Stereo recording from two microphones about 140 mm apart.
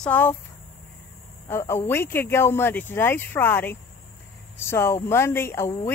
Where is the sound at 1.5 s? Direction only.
15° left (ahead or behind).